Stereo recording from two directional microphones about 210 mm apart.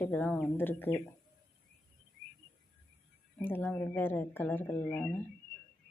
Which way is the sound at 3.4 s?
10° left (ahead or behind).